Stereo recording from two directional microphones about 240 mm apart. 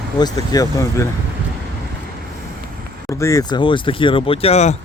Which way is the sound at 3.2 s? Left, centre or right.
Centre.